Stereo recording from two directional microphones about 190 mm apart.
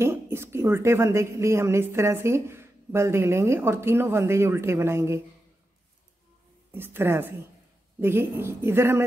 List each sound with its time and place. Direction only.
0.0 s a woman's voice: 15° right (ahead or behind)
6.7 s a woman's voice: 10° right (ahead or behind)